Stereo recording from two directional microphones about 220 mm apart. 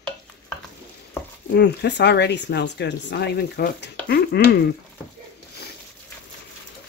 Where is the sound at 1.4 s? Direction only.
50° left (ahead or behind).